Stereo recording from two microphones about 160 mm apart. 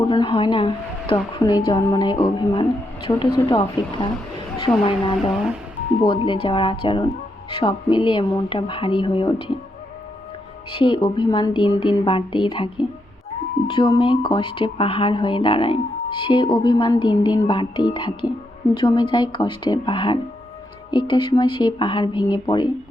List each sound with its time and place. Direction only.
0.0 s speech: 30° left (ahead or behind)
10.7 s speech: 30° left (ahead or behind)